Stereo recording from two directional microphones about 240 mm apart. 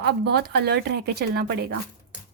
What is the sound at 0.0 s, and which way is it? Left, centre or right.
Speech, right.